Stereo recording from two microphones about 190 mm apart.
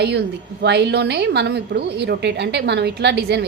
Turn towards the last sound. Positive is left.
turn(degrees=-60)  # may be behind; listen again after turning